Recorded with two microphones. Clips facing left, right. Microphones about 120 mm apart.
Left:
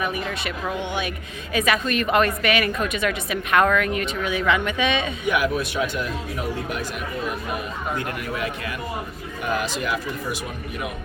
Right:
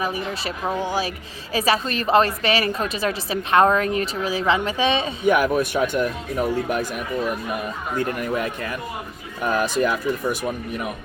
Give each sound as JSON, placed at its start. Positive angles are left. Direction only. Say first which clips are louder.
{"t": 0.0, "sound": "a woman's voice", "louder": "right 1 dB", "side_deg": -30}
{"t": 5.3, "sound": "speech", "louder": "right 4 dB", "side_deg": -45}
{"t": 9.4, "sound": "speech", "louder": "right 5 dB", "side_deg": -45}